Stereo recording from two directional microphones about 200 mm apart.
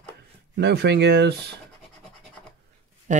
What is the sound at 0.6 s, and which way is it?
Speech, 55° right (ahead or behind).